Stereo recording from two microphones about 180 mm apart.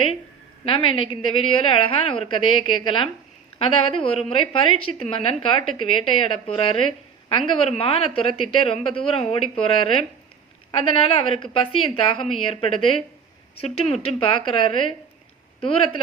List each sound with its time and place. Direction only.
0.6 s a woman's voice: 30° left (ahead or behind)